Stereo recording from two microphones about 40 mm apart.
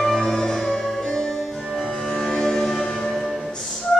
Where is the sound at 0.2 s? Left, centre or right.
Centre.